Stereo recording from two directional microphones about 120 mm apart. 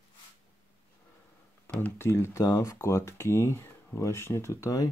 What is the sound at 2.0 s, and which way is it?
Speech, 20° left (ahead or behind).